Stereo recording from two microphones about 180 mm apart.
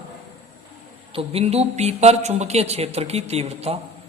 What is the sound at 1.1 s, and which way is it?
Speech, 35° right (ahead or behind).